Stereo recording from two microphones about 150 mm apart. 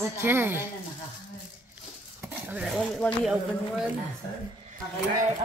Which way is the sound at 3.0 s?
10° left (ahead or behind).